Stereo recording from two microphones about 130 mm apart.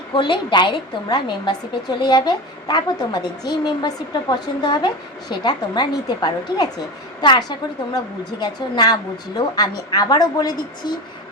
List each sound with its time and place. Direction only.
0.1 s a woman's voice: 40° left (ahead or behind)